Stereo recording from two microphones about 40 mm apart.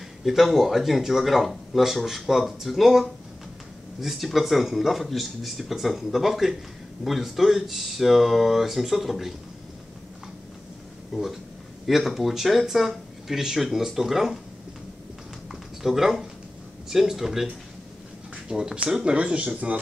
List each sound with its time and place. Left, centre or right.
0.2 s speech: centre
11.8 s speech: centre
15.8 s speech: centre
19.0 s speech: right